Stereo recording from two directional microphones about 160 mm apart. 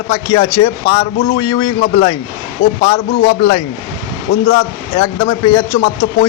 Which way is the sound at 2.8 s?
60° left (ahead or behind).